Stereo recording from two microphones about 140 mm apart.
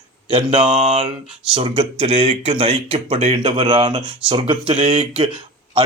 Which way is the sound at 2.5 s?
40° right (ahead or behind).